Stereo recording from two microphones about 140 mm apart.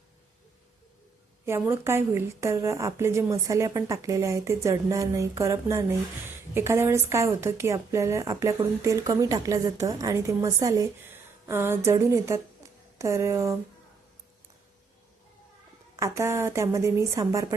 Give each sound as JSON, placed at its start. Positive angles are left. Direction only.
{"t": 1.5, "sound": "a woman's voice", "side_deg": -15}
{"t": 16.0, "sound": "a woman's voice", "side_deg": -20}